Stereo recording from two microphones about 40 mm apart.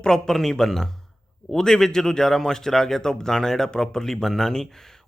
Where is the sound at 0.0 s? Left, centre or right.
Centre.